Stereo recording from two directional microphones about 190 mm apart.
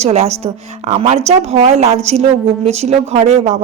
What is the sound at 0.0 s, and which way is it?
A woman's voice, 35° right (ahead or behind).